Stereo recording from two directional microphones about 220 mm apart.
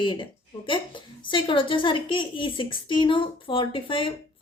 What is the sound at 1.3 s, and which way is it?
A woman's voice, 20° left (ahead or behind).